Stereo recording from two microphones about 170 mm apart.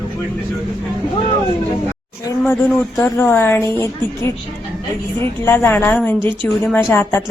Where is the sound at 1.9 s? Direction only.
15° left (ahead or behind).